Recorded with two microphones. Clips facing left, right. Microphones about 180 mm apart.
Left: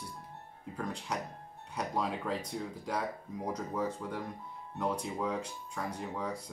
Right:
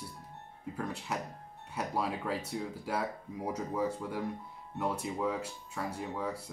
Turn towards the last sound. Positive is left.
turn(degrees=-5)  # may be behind; listen again after turning